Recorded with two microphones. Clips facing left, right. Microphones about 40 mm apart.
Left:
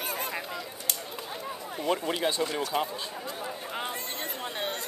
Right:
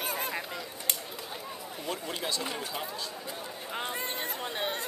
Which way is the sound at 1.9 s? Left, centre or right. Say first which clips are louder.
Left 6 dB; left.